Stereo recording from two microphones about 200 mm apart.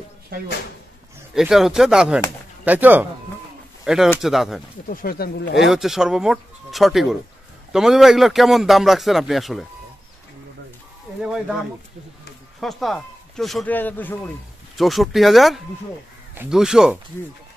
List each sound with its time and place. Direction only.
0.3 s speech: 50° right (ahead or behind)
1.3 s a man's voice: centre (ahead or behind)
4.8 s speech: 50° left (ahead or behind)
5.6 s a man's voice: centre (ahead or behind)
11.2 s a man's voice: 5° right (ahead or behind)
12.5 s a man's voice: centre (ahead or behind)